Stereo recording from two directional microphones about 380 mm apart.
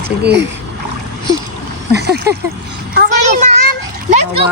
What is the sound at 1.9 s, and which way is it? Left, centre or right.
Speech, right.